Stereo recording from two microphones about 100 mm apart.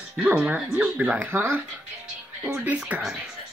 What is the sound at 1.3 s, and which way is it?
Speech, 25° right (ahead or behind).